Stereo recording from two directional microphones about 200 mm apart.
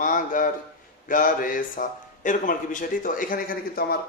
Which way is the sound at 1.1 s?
45° left (ahead or behind).